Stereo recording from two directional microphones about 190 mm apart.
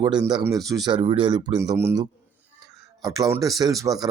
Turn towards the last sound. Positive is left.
turn(degrees=-20)  # may be behind; listen again after turning